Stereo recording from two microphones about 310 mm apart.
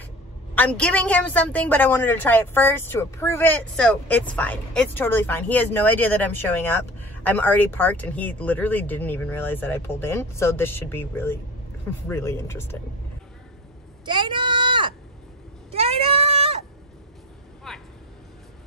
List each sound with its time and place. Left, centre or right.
0.6 s a woman's voice: centre
14.0 s a sound: centre
15.7 s goat: centre
17.7 s vehicle: centre